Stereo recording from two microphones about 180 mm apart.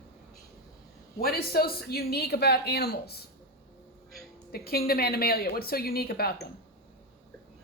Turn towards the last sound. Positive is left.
turn(degrees=60)  # may be behind; listen again after turning